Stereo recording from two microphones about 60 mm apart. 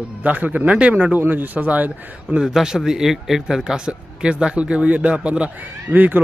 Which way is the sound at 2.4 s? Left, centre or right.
Centre.